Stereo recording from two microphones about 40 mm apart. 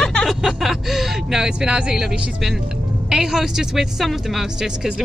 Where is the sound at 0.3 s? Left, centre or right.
Centre; by 2.0 s right.